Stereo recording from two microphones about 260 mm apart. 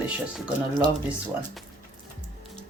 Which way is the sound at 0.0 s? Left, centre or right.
Centre.